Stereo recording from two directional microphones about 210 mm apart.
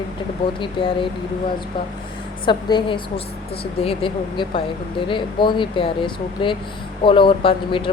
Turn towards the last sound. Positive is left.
turn(degrees=25)  # may be behind; listen again after turning